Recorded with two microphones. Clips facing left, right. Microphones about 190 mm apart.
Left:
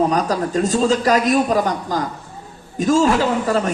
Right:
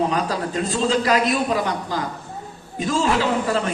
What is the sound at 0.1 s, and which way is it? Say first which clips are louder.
A man's voice: left 4 dB; 40° left (ahead or behind).